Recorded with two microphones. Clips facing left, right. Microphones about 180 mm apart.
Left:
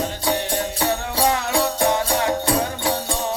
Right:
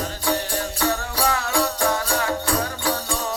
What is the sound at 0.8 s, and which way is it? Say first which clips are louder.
Music: left 1 dB; 25° left (ahead or behind).